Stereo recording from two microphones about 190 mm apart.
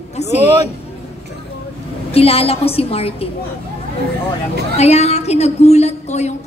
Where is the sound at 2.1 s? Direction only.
30° left (ahead or behind).